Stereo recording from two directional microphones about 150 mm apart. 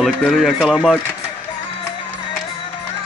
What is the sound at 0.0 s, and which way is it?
Speech, centre (ahead or behind).